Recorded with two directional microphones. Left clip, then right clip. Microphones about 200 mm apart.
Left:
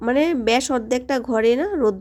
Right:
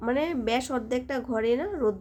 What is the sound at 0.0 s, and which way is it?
A woman's voice, 40° left (ahead or behind).